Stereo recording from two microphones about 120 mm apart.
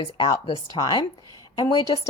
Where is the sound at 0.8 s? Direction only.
30° left (ahead or behind).